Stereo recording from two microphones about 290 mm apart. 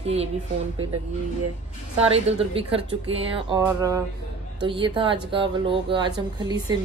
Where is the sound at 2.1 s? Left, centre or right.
Centre.